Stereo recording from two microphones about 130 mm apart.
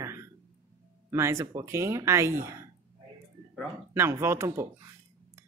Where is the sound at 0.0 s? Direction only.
20° right (ahead or behind).